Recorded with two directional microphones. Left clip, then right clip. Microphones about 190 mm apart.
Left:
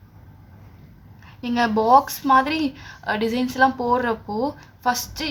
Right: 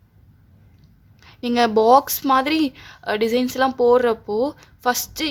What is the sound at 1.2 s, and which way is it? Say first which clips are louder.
A woman's voice: right 3 dB; 45° right (ahead or behind).